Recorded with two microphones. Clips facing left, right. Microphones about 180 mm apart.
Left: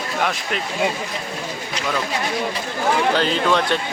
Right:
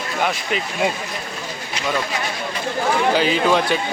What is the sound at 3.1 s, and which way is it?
Speech, 5° right (ahead or behind).